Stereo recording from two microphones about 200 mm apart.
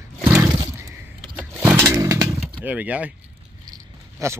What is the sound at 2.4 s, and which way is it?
Speech, 10° right (ahead or behind).